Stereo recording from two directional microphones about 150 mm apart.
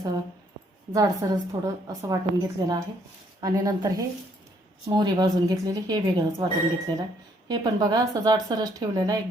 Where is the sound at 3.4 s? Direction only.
25° right (ahead or behind).